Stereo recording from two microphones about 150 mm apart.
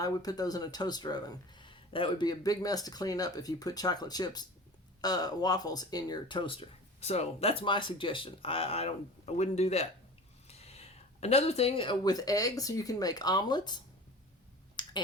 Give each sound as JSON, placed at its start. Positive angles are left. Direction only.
{"t": 0.0, "sound": "speech", "side_deg": 25}
{"t": 14.8, "sound": "finger snapping", "side_deg": 30}